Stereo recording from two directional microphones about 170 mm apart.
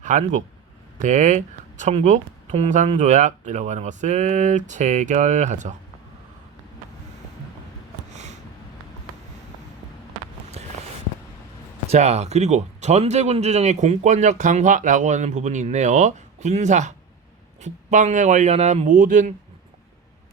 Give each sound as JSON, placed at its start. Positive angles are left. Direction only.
{"t": 0.0, "sound": "speech", "side_deg": -45}
{"t": 8.1, "sound": "a sound", "side_deg": -45}
{"t": 11.9, "sound": "speech", "side_deg": -40}